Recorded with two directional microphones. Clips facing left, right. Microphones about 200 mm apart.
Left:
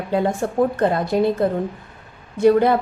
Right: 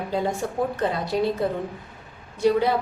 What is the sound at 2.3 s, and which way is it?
Speech, 55° left (ahead or behind).